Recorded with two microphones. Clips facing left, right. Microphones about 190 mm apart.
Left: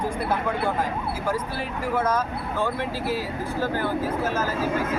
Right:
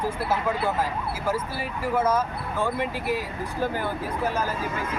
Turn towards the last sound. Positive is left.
turn(degrees=-15)  # may be behind; listen again after turning